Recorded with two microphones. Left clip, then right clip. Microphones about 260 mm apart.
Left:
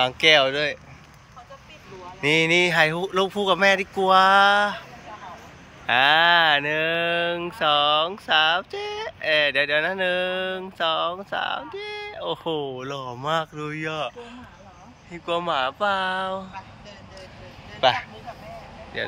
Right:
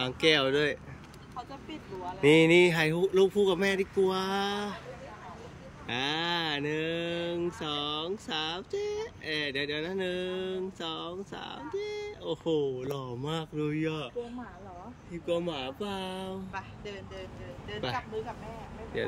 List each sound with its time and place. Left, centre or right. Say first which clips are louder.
0.0 s speech: left 9 dB; centre
2.2 s speech: left 2 dB; centre
5.9 s speech: left 15 dB; centre
17.7 s speech: left 13 dB; centre